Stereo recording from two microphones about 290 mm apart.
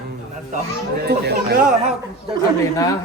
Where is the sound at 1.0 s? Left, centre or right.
Right.